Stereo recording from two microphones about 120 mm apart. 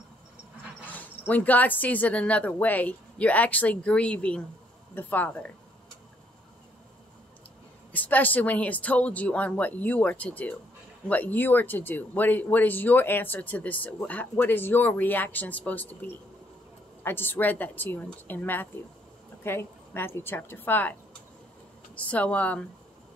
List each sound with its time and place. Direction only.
0.9 s speech: 15° left (ahead or behind)
7.9 s speech: 15° left (ahead or behind)
17.0 s speech: 15° left (ahead or behind)